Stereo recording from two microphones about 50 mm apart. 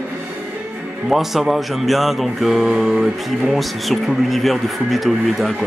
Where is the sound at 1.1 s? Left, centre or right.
Centre.